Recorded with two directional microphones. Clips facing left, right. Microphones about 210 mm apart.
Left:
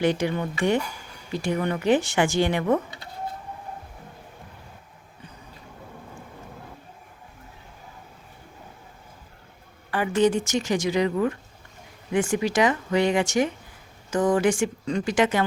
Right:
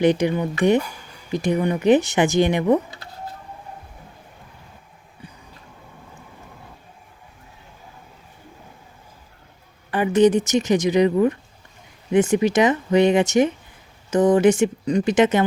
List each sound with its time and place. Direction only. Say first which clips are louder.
0.0 s speech: right 5 dB; 20° right (ahead or behind)
9.9 s speech: right 5 dB; 20° right (ahead or behind)